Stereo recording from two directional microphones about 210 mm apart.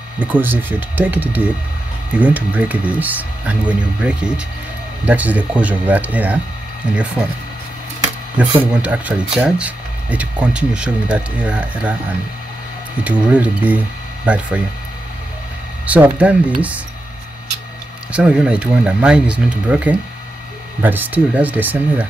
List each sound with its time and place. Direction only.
0.2 s speech: 10° right (ahead or behind)
8.4 s speech: 5° right (ahead or behind)
13.0 s speech: 5° right (ahead or behind)
15.8 s speech: 5° right (ahead or behind)
18.1 s speech: 5° right (ahead or behind)